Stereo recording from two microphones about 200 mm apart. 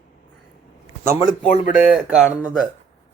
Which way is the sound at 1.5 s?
40° left (ahead or behind).